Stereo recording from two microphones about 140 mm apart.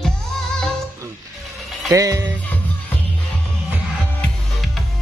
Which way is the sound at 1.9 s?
25° right (ahead or behind).